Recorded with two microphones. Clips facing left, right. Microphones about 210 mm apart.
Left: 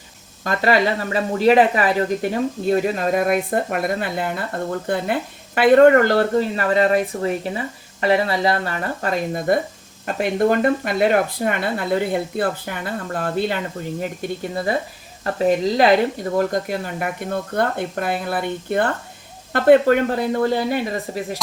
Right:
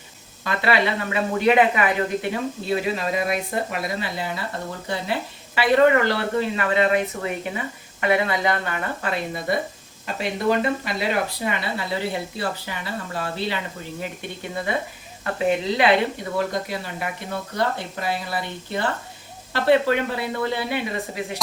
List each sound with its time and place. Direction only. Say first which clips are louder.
0.4 s speech: left 4 dB; 45° left (ahead or behind)
14.0 s speech: left 5 dB; 40° left (ahead or behind)